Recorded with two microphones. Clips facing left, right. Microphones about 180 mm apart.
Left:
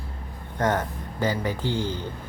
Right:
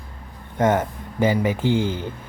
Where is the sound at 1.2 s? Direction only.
15° right (ahead or behind).